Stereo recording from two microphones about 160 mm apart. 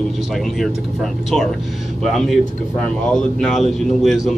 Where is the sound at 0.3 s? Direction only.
Centre (ahead or behind).